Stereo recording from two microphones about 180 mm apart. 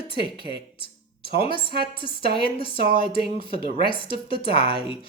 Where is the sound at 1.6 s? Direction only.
30° left (ahead or behind).